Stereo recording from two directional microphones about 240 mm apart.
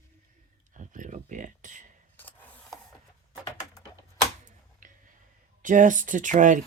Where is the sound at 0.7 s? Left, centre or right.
Right.